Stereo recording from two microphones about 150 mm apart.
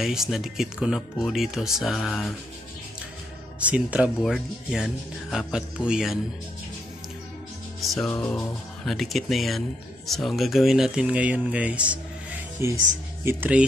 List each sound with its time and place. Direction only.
0.0 s speech: centre (ahead or behind)
3.5 s speech: 10° right (ahead or behind)
7.8 s music: centre (ahead or behind)
8.1 s music: 10° left (ahead or behind)
8.8 s speech: centre (ahead or behind)